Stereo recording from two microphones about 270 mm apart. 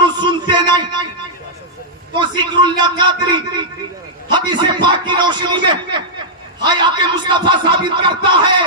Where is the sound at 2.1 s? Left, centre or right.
Centre.